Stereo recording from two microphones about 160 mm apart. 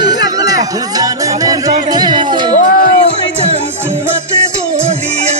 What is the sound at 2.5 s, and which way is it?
Music, 65° left (ahead or behind).